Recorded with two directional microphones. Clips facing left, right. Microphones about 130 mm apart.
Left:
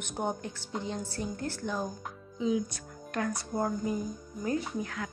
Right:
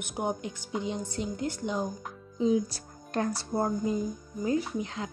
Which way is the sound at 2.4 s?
35° right (ahead or behind).